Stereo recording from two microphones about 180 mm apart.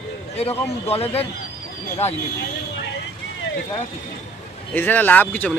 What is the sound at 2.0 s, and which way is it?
Speech, 15° left (ahead or behind).